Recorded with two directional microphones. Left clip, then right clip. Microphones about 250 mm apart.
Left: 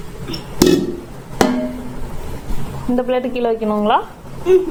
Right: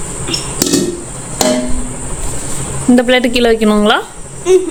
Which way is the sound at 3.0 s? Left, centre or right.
Right.